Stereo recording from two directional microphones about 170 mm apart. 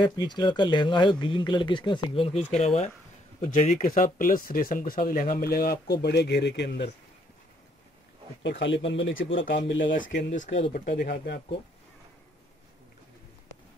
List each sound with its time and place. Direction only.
0.0 s speech: 25° left (ahead or behind); by 6.9 s 80° left
8.4 s speech: 90° left; by 9.6 s 75° left (ahead or behind)
9.8 s speech: 50° left (ahead or behind)
10.7 s speech: 70° left (ahead or behind)